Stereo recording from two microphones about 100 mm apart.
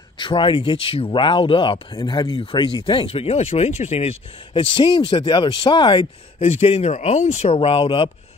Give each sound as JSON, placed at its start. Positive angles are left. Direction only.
{"t": 0.2, "sound": "speech", "side_deg": 55}
{"t": 2.0, "sound": "speech", "side_deg": 45}
{"t": 4.6, "sound": "speech", "side_deg": 60}
{"t": 6.4, "sound": "speech", "side_deg": 90}